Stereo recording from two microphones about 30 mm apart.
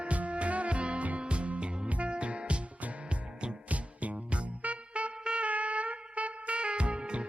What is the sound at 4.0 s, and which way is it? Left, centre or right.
Music, right.